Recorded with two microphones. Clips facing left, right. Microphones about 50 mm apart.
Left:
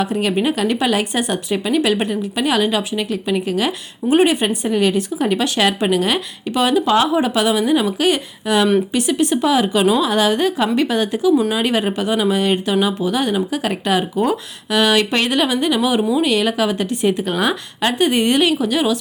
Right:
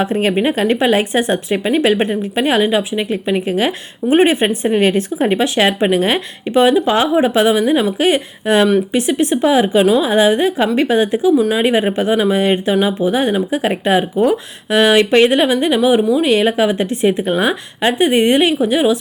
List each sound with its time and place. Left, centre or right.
0.0 s speech: right
16.0 s speech: centre
16.2 s speech: right